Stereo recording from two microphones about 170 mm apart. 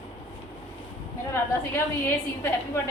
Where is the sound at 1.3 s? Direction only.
15° left (ahead or behind).